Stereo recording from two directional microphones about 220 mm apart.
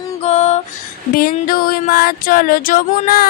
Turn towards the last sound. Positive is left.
turn(degrees=40)  # may be behind; listen again after turning